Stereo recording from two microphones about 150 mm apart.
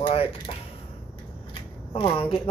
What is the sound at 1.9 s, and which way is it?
Speech, 35° left (ahead or behind).